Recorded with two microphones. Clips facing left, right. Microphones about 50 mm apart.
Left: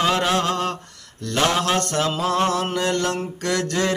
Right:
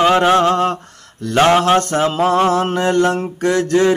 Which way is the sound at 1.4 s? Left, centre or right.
Right.